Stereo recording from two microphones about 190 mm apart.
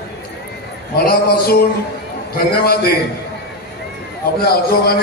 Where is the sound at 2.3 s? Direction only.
55° left (ahead or behind).